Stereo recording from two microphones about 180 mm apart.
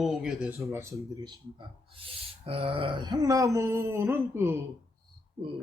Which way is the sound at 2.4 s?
30° right (ahead or behind).